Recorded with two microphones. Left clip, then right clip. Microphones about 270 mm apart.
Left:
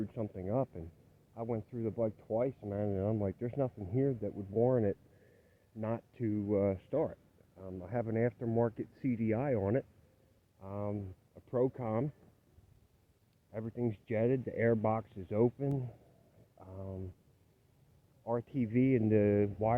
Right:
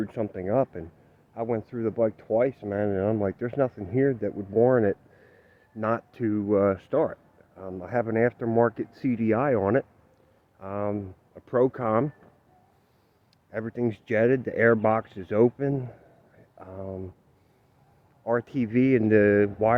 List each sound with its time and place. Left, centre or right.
0.0 s speech: centre
13.5 s speech: centre
18.3 s speech: centre